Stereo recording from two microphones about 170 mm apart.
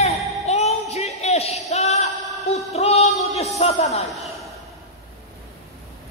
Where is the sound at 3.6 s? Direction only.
40° left (ahead or behind).